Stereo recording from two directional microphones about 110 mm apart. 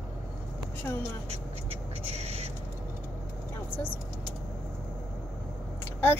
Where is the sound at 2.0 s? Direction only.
70° right (ahead or behind).